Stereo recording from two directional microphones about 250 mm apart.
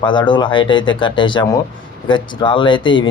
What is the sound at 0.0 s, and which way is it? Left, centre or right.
Speech, centre.